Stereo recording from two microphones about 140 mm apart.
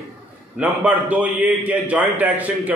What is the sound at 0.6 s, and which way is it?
A man's voice, 10° right (ahead or behind).